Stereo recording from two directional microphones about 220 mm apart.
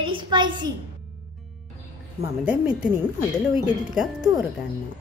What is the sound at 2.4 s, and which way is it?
Speech, 5° right (ahead or behind).